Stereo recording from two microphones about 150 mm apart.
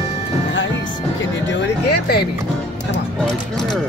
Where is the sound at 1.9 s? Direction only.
90° left.